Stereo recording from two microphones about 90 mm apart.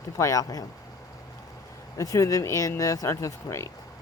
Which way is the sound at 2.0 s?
40° left (ahead or behind).